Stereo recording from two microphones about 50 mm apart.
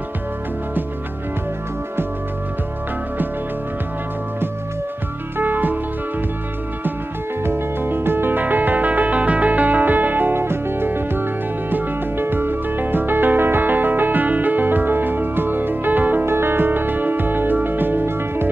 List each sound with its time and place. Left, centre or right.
5.4 s music: right
7.4 s music: right
16.3 s music: right